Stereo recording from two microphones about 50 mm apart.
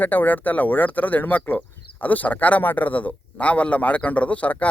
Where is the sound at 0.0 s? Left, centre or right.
Left.